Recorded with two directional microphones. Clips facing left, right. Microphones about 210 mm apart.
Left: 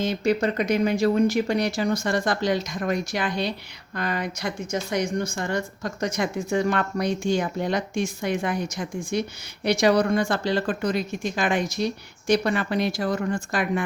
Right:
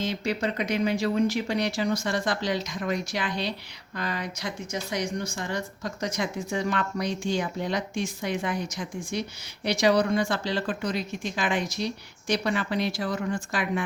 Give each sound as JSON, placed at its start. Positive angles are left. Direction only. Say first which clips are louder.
{"t": 0.0, "sound": "a woman's voice", "louder": "left 5 dB", "side_deg": 45}